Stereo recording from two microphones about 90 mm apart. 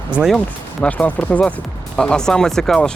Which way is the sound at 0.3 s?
15° left (ahead or behind).